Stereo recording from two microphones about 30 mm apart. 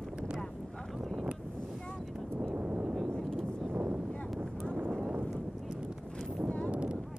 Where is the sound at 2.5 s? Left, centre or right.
Right.